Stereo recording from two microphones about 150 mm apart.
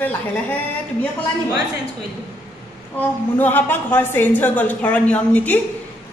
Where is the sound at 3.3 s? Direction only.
15° left (ahead or behind).